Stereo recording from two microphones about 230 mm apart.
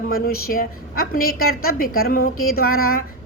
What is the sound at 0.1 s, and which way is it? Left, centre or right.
A woman's voice, left.